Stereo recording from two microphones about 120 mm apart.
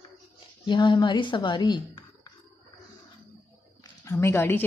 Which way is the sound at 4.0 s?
20° left (ahead or behind).